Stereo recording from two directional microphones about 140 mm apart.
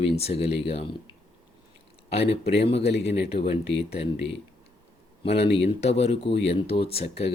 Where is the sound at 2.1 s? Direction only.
45° left (ahead or behind).